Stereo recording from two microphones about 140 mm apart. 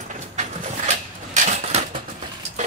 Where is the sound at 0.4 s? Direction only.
55° right (ahead or behind).